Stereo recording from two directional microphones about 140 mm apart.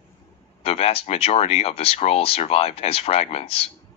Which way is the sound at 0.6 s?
45° left (ahead or behind).